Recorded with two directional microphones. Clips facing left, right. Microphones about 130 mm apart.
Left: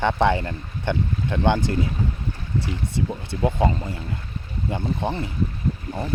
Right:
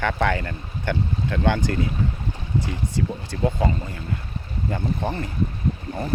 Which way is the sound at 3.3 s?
25° left (ahead or behind).